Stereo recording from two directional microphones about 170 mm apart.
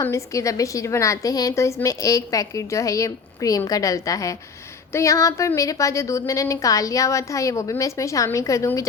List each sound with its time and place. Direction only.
0.0 s a woman's voice: 15° left (ahead or behind)